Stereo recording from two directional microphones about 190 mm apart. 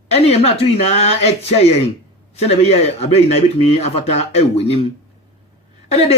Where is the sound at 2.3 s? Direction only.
35° left (ahead or behind).